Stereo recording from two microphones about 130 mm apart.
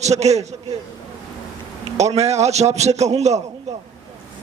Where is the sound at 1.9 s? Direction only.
60° right (ahead or behind).